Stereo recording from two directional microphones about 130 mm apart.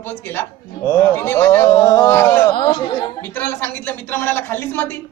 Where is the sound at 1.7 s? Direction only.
30° left (ahead or behind).